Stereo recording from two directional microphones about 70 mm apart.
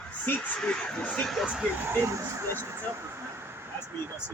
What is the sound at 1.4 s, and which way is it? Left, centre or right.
Speech, centre.